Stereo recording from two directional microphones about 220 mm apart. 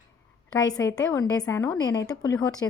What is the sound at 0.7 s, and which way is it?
A woman's voice, 15° left (ahead or behind).